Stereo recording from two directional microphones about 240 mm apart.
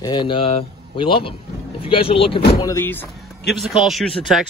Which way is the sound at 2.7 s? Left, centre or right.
Centre.